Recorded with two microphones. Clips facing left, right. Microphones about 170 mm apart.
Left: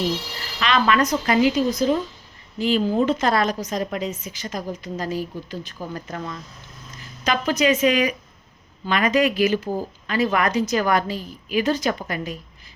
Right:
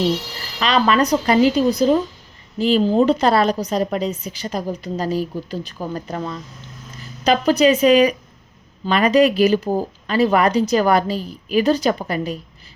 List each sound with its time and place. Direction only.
0.6 s a woman's voice: 35° right (ahead or behind)